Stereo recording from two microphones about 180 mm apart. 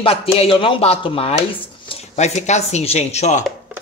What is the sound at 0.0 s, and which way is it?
Speech, 30° left (ahead or behind).